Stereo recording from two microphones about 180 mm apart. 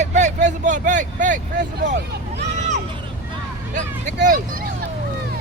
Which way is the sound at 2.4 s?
40° right (ahead or behind).